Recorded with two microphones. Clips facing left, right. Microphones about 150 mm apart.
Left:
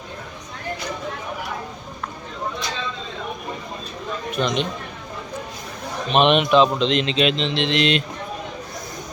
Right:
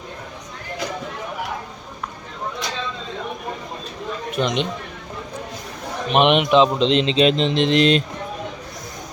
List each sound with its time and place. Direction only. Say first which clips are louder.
4.4 s speech: right 1 dB; 20° right (ahead or behind)
6.1 s speech: right 1 dB; 15° right (ahead or behind)
6.8 s speech: right 3 dB; 30° right (ahead or behind)